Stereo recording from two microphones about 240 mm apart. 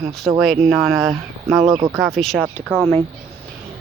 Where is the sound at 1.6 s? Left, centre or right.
Centre.